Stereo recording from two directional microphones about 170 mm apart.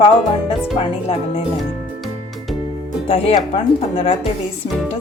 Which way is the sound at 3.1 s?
35° left (ahead or behind).